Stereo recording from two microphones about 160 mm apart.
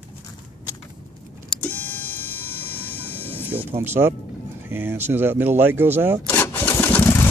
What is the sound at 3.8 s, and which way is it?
Speech, 15° right (ahead or behind).